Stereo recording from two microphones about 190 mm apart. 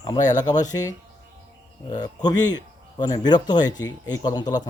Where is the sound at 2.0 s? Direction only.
20° left (ahead or behind).